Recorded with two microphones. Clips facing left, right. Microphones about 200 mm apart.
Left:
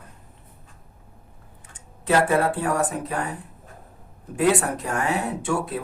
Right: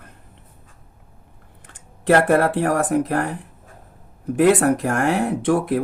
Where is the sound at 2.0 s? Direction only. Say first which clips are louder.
Right 4 dB; 75° right (ahead or behind).